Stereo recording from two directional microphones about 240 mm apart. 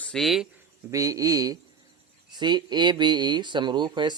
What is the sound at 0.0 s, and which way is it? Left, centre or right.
Speech, centre.